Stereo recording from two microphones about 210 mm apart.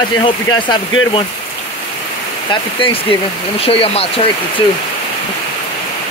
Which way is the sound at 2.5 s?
25° left (ahead or behind).